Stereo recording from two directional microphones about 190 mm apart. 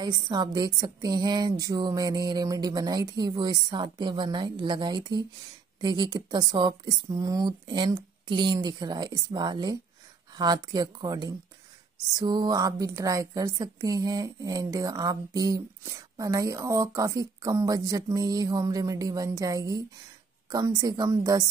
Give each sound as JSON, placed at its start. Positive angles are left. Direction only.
{"t": 0.0, "sound": "a woman's voice", "side_deg": -20}